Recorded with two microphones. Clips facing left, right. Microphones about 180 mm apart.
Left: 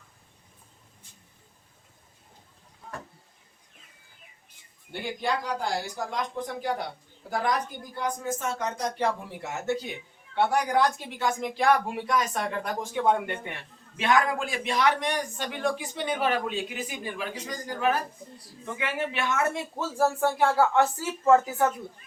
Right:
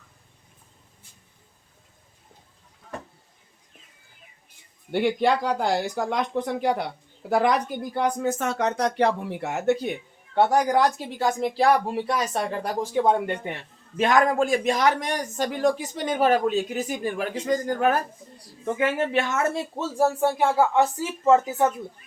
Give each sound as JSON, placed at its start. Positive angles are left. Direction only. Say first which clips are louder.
{"t": 4.9, "sound": "speech", "louder": "right 9 dB", "side_deg": -75}
{"t": 10.3, "sound": "speech", "louder": "right 4 dB", "side_deg": -40}
{"t": 20.0, "sound": "speech", "louder": "right 2 dB", "side_deg": -15}